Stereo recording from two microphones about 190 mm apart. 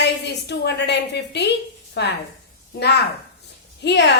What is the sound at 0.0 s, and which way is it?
A woman's voice, 60° left (ahead or behind).